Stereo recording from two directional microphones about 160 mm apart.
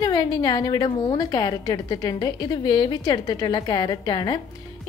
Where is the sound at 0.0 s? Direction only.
25° left (ahead or behind).